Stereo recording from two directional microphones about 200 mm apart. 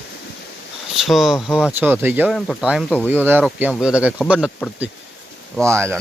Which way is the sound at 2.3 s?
Centre (ahead or behind).